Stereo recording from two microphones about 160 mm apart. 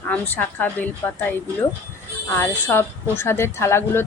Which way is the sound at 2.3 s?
15° left (ahead or behind).